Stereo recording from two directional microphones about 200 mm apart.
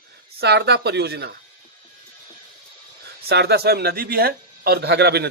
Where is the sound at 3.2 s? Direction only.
55° right (ahead or behind).